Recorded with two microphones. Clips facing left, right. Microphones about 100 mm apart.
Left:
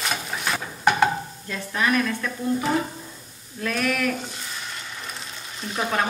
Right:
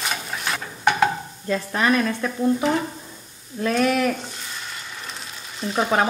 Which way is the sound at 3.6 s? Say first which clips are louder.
Right 5 dB; 30° right (ahead or behind).